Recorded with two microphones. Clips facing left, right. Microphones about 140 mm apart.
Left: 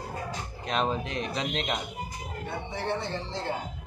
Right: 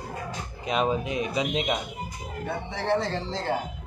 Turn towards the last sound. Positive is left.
turn(degrees=-90)